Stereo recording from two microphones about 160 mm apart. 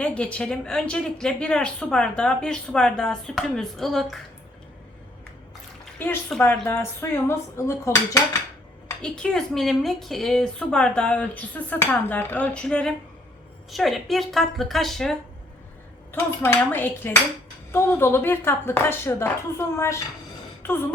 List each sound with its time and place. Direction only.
0.0 s speech: 5° left (ahead or behind)
6.0 s a woman's voice: 15° left (ahead or behind)
9.0 s a woman's voice: 5° left (ahead or behind)
16.1 s a woman's voice: 15° left (ahead or behind)
20.6 s a sound: 15° left (ahead or behind)